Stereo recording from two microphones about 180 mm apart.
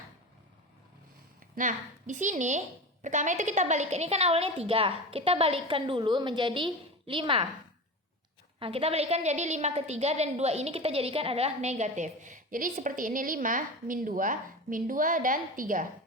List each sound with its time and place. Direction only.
1.5 s a woman's voice: 45° right (ahead or behind); by 7.4 s 30° right (ahead or behind)
8.5 s a woman's voice: 30° right (ahead or behind); by 15.9 s 50° right (ahead or behind)